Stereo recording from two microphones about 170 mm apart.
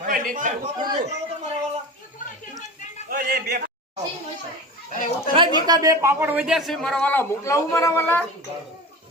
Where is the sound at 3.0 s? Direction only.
60° right (ahead or behind).